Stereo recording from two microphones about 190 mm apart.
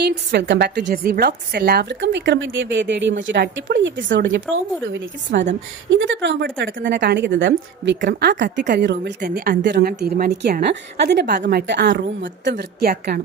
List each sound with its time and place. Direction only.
0.0 s a woman's voice: 60° right (ahead or behind)
9.2 s a woman's voice: 50° right (ahead or behind)